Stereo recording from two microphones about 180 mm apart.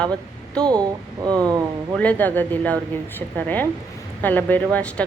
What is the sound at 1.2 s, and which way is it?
Speech, 20° right (ahead or behind).